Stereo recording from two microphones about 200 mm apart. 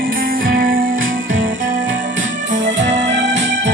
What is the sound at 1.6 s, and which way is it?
Music, 40° right (ahead or behind).